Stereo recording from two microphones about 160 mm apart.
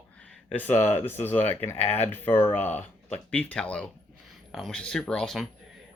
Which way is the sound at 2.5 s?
45° left (ahead or behind).